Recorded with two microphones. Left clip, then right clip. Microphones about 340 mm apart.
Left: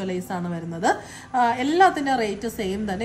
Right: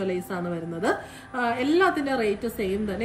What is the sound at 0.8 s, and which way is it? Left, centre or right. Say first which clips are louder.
A woman's voice: left 5 dB; left.